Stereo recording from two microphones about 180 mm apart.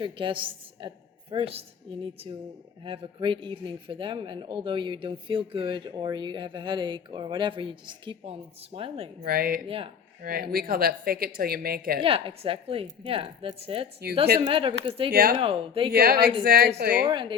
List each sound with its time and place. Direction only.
0.0 s a woman's voice: 30° right (ahead or behind)
2.8 s speech: 30° right (ahead or behind)
9.2 s a woman's voice: 55° right (ahead or behind)
9.6 s speech: 30° right (ahead or behind)
10.2 s a woman's voice: 55° right (ahead or behind)
12.0 s speech: 30° right (ahead or behind)
15.1 s a woman's voice: 55° right (ahead or behind)
15.4 s speech: 30° right (ahead or behind)
15.9 s a woman's voice: 60° right (ahead or behind)
17.1 s speech: 25° right (ahead or behind)